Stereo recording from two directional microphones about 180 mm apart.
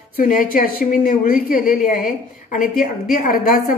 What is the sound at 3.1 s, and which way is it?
Speech, 50° left (ahead or behind).